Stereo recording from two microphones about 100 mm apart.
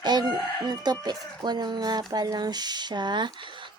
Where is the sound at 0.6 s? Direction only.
45° right (ahead or behind).